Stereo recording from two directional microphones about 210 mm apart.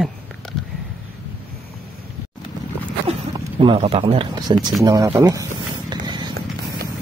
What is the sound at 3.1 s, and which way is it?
Speech, 25° right (ahead or behind).